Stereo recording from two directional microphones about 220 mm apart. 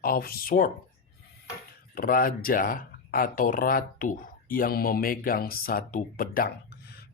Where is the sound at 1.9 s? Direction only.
40° left (ahead or behind).